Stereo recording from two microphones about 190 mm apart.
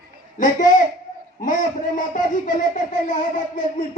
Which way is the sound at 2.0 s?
45° left (ahead or behind).